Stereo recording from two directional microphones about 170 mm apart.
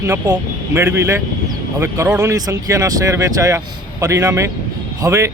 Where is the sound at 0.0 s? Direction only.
15° right (ahead or behind).